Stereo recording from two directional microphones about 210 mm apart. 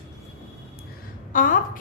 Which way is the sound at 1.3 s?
40° left (ahead or behind).